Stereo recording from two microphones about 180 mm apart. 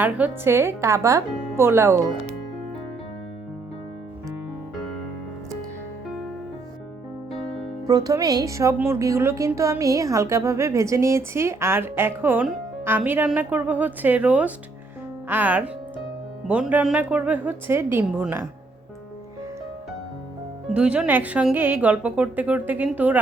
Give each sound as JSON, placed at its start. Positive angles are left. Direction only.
{"t": 0.0, "sound": "speech", "side_deg": -10}
{"t": 7.9, "sound": "speech", "side_deg": -20}
{"t": 20.7, "sound": "speech", "side_deg": -5}